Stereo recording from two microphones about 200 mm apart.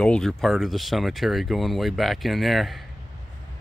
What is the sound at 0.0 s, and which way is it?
Speech, 5° left (ahead or behind).